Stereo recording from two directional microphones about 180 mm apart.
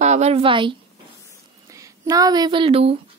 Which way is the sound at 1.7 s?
20° right (ahead or behind).